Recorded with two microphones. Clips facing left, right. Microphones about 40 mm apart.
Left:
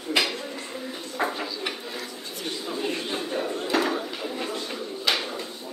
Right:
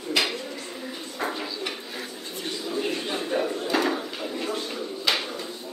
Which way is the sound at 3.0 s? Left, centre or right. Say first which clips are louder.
Right 2 dB; centre.